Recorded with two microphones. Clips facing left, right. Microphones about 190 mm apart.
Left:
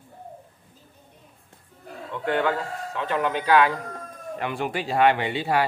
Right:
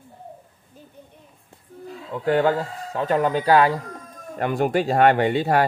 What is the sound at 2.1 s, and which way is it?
Speech, 40° right (ahead or behind).